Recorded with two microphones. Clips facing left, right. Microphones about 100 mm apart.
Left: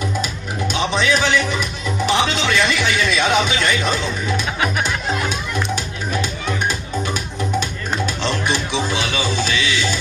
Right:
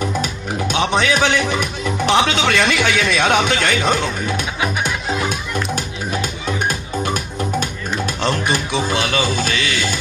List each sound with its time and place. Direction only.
0.7 s speech: 55° right (ahead or behind)
8.2 s speech: 50° right (ahead or behind)